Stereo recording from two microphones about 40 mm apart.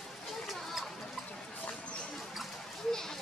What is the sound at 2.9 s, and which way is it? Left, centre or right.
Children playing, centre.